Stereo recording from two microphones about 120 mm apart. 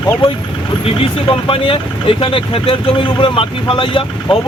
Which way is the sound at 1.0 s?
50° left (ahead or behind).